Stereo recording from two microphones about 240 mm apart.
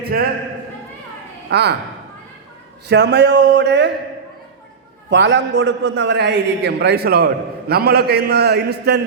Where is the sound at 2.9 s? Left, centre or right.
Right.